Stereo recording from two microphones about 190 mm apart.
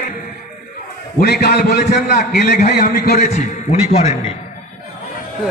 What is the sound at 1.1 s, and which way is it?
A man's voice, 60° left (ahead or behind).